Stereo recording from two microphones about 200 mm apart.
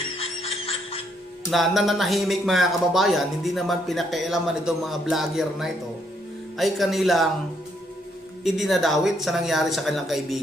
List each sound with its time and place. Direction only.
0.2 s a sound: 30° left (ahead or behind)
1.5 s speech: centre (ahead or behind)
8.4 s speech: centre (ahead or behind)